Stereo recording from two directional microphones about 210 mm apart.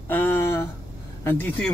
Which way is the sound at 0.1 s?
10° left (ahead or behind).